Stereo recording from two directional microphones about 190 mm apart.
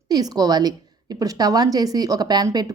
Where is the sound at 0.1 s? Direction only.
20° right (ahead or behind).